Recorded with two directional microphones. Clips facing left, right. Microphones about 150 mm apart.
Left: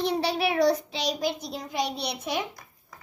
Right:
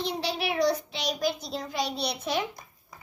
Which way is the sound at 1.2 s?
15° left (ahead or behind).